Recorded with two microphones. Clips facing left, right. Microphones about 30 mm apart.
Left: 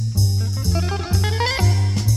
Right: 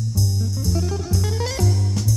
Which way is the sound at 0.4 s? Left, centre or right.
Left.